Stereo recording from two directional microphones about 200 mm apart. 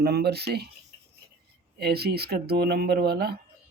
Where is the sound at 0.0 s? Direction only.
55° right (ahead or behind).